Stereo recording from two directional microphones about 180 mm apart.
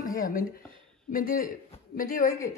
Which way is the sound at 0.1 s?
50° left (ahead or behind).